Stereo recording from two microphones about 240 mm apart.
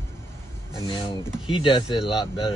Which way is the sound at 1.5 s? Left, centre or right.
Centre.